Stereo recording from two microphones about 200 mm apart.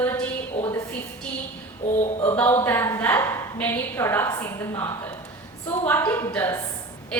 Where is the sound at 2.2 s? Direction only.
10° left (ahead or behind).